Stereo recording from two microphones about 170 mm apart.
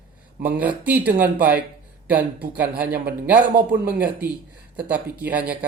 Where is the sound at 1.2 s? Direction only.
10° right (ahead or behind).